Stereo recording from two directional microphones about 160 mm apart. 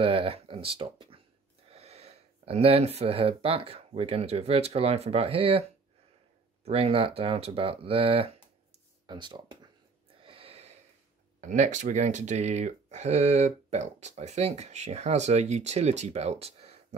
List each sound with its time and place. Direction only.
0.0 s speech: 35° right (ahead or behind)
10.2 s a sound: 35° right (ahead or behind)
11.4 s speech: 50° right (ahead or behind)